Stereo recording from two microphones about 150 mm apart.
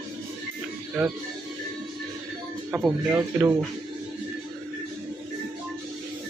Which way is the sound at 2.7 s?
10° right (ahead or behind).